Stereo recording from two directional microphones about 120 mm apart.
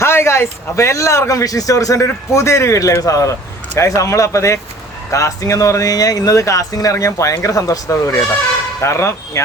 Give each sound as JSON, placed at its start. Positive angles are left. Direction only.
{"t": 0.0, "sound": "speech", "side_deg": 20}